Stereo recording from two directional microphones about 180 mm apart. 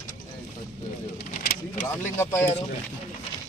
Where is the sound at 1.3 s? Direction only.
50° left (ahead or behind).